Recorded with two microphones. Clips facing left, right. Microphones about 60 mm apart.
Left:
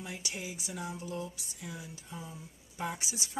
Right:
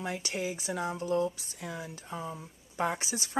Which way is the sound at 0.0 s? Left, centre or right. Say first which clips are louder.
Right 7 dB; right.